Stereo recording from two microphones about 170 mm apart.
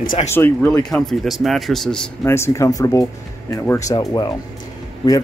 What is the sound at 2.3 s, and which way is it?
Speech, 15° left (ahead or behind).